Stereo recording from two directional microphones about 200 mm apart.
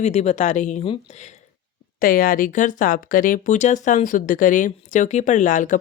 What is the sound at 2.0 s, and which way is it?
Speech, 45° left (ahead or behind).